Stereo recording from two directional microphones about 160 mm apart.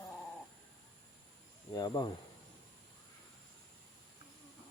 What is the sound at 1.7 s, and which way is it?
Cricket, 25° left (ahead or behind).